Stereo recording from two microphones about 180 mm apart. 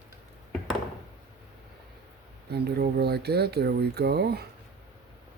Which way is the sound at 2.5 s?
65° right (ahead or behind).